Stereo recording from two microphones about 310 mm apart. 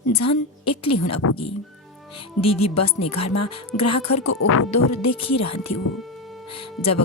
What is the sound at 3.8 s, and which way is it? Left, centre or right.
A woman's voice, left.